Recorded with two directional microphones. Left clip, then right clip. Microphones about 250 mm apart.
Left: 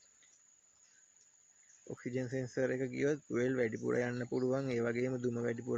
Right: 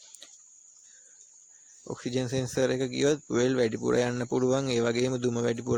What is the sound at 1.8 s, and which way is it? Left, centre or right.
Speech, right.